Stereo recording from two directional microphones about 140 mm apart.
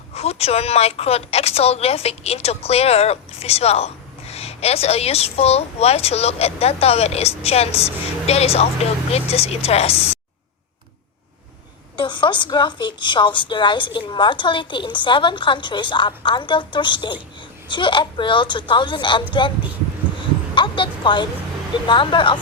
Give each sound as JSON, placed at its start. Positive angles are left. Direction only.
{"t": 0.1, "sound": "a woman's voice", "side_deg": 45}
{"t": 11.9, "sound": "a woman's voice", "side_deg": 35}
{"t": 20.6, "sound": "a woman's voice", "side_deg": 35}